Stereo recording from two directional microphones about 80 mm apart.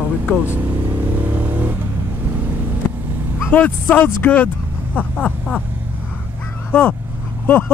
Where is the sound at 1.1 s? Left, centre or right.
Right.